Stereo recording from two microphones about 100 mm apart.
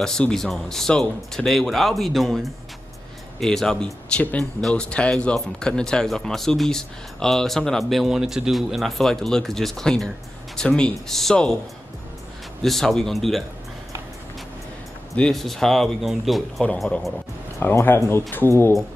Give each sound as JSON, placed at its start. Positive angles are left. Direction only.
{"t": 0.0, "sound": "speech", "side_deg": 5}
{"t": 12.6, "sound": "speech", "side_deg": 5}
{"t": 15.1, "sound": "speech", "side_deg": 5}
{"t": 17.6, "sound": "speech", "side_deg": 20}